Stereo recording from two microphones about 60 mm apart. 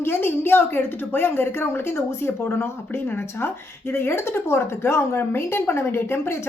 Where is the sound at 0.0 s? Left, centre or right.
Left.